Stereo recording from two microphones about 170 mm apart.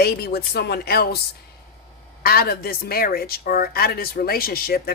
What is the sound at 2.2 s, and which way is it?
Speech, 65° left (ahead or behind).